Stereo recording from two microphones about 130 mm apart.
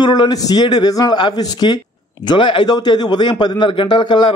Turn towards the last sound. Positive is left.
turn(degrees=35)  # may be behind; listen again after turning